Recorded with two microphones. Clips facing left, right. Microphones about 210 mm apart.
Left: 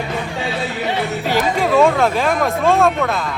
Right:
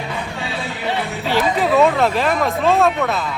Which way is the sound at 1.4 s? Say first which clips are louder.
Even; centre (ahead or behind).